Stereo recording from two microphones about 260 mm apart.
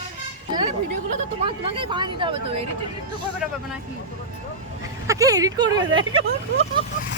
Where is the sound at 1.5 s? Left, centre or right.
Centre.